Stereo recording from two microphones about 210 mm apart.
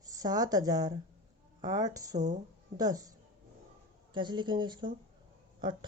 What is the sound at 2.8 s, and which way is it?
Speech, 20° right (ahead or behind).